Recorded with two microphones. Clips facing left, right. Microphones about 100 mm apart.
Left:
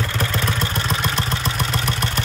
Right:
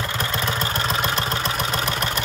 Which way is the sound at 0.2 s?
25° right (ahead or behind).